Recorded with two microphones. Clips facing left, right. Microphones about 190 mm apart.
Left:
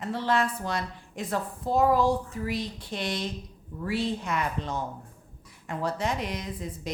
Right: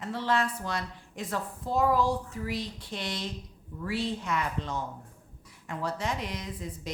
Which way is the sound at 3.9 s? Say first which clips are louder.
Left 3 dB; 15° left (ahead or behind).